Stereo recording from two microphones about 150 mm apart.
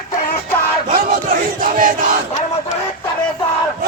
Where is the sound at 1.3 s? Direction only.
65° right (ahead or behind).